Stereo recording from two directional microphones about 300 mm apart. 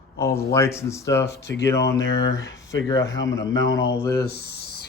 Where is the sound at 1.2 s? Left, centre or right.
Left.